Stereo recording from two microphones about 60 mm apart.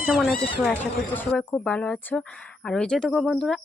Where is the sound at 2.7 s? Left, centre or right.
Centre.